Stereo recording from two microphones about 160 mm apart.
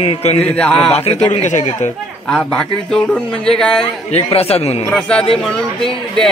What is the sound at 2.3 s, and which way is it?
A man's voice, 5° left (ahead or behind).